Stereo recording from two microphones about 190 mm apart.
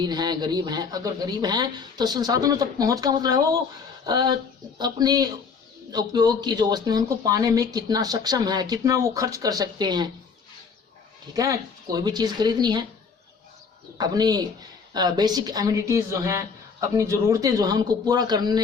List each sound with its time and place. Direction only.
0.0 s speech: 20° right (ahead or behind)
11.3 s speech: 20° right (ahead or behind)
14.0 s speech: 20° right (ahead or behind)